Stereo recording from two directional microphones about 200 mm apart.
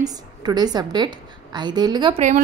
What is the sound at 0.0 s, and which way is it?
A woman's voice, 20° right (ahead or behind).